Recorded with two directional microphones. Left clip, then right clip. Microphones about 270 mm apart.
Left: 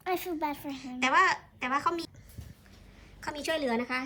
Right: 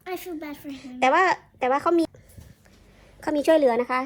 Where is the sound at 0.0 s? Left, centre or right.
Centre.